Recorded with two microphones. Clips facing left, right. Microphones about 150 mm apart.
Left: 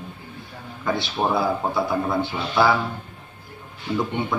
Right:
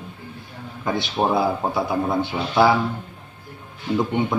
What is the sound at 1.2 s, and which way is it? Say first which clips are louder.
Speech: right 3 dB; 20° right (ahead or behind).